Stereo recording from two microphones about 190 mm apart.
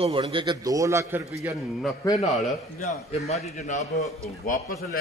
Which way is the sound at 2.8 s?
35° left (ahead or behind).